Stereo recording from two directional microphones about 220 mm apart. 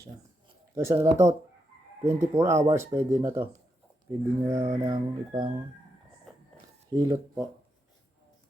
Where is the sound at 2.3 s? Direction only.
15° right (ahead or behind).